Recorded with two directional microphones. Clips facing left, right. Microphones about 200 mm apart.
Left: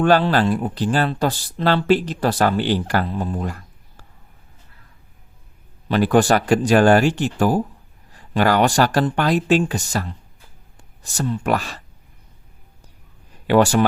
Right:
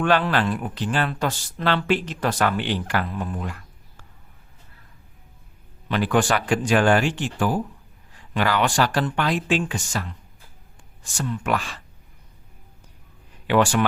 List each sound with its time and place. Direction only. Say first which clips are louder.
0.0 s speech: left 5 dB; 35° left (ahead or behind)
5.9 s speech: left 5 dB; 40° left (ahead or behind)
13.5 s speech: left 4 dB; 40° left (ahead or behind)